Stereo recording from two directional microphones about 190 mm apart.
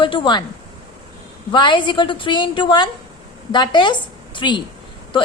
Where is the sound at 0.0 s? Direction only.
25° left (ahead or behind).